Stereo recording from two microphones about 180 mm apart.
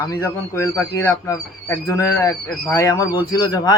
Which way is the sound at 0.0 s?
15° left (ahead or behind).